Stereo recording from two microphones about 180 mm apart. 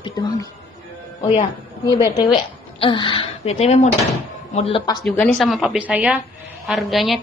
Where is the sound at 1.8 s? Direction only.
20° left (ahead or behind).